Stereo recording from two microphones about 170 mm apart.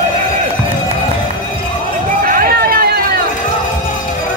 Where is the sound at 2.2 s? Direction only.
55° right (ahead or behind).